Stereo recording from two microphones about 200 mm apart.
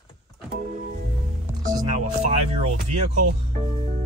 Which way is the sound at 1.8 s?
35° right (ahead or behind).